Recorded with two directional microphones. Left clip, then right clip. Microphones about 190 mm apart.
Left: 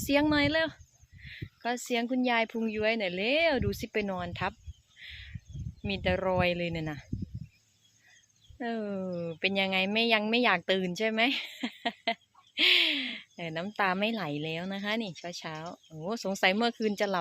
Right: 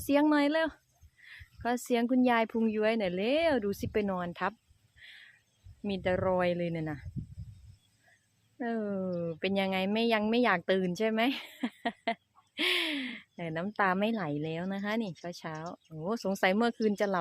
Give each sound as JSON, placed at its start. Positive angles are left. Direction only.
{"t": 0.0, "sound": "speech", "side_deg": -10}
{"t": 5.8, "sound": "speech", "side_deg": -10}
{"t": 8.5, "sound": "speech", "side_deg": -10}